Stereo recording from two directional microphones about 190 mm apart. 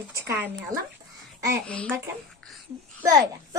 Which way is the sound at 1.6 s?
5° left (ahead or behind).